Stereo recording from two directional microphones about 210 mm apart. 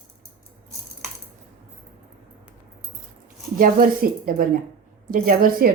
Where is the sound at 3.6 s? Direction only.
40° right (ahead or behind).